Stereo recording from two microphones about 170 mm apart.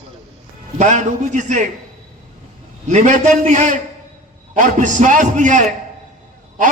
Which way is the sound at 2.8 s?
45° right (ahead or behind).